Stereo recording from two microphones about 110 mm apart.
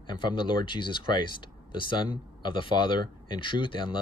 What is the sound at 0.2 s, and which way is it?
Speech, 45° left (ahead or behind).